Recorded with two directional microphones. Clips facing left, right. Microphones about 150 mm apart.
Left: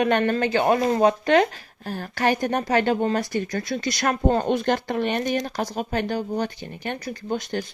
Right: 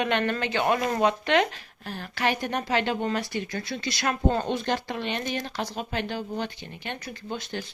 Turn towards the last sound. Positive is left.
turn(degrees=50)  # may be behind; listen again after turning